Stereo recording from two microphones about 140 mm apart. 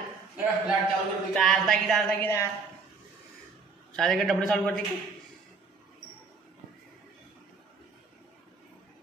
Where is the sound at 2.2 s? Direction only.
15° left (ahead or behind).